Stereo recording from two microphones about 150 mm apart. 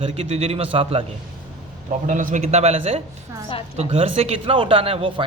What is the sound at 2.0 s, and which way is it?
A man's voice, 60° right (ahead or behind).